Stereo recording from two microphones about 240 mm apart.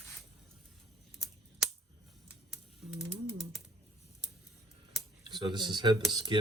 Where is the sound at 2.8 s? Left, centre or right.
Centre.